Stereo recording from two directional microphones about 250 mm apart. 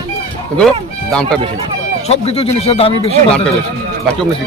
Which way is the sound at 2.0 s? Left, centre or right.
Left.